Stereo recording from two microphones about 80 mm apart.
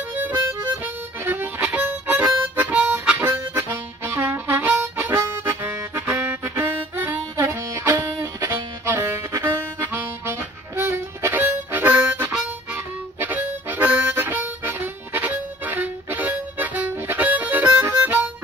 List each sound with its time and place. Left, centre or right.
0.1 s music: right
0.8 s harmonica: right
8.5 s harmonica: right